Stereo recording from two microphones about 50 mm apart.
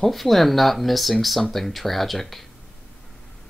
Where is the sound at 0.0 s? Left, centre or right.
Centre.